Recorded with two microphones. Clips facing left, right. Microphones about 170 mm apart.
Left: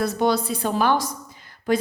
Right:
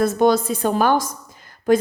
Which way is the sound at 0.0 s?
50° right (ahead or behind).